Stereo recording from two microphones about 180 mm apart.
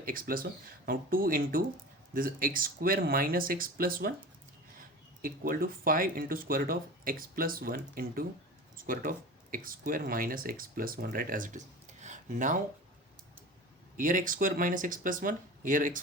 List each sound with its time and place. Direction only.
0.0 s speech: 50° right (ahead or behind)
5.2 s speech: 50° right (ahead or behind)
13.9 s speech: 45° right (ahead or behind)